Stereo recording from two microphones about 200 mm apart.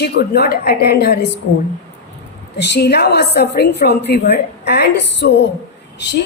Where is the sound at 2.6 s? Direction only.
55° left (ahead or behind).